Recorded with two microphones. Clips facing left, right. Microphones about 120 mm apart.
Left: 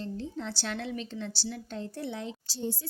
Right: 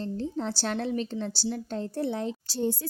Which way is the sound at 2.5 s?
55° right (ahead or behind).